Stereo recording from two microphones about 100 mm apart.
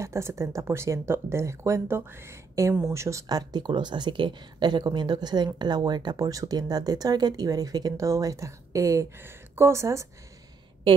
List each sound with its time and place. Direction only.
0.0 s speech: 30° right (ahead or behind)